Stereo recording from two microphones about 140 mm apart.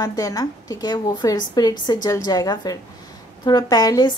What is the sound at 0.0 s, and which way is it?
A woman's voice, 25° left (ahead or behind).